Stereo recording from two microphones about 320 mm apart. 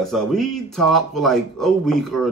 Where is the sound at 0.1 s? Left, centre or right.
Centre.